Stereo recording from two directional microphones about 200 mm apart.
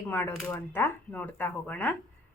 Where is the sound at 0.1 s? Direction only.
10° left (ahead or behind).